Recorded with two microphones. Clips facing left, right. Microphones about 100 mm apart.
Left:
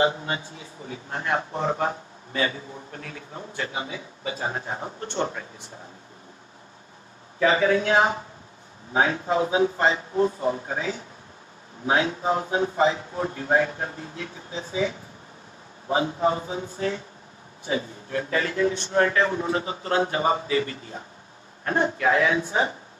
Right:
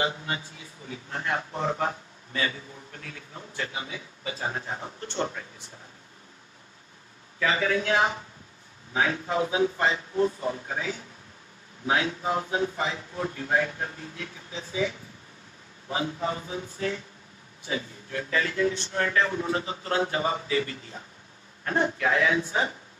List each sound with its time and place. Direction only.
0.0 s a man's voice: 30° left (ahead or behind)
7.3 s a man's voice: 30° left (ahead or behind)